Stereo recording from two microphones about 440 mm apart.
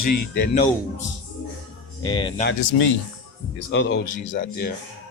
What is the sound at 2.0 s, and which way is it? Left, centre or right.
Speech, centre.